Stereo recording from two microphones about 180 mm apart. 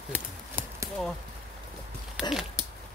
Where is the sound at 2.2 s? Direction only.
Centre (ahead or behind).